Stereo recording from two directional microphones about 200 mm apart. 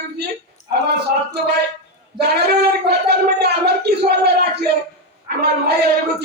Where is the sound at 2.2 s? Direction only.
55° right (ahead or behind).